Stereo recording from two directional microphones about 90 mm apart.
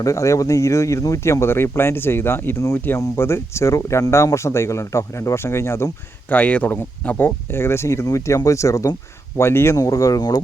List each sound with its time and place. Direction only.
0.0 s speech: 35° left (ahead or behind)
6.3 s speech: 15° left (ahead or behind)
9.7 s speech: 40° left (ahead or behind)